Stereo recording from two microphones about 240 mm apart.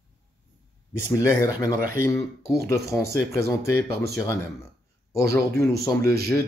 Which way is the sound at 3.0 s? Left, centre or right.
Centre.